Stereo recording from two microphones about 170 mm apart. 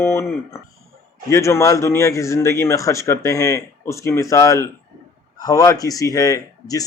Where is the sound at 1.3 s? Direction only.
15° left (ahead or behind).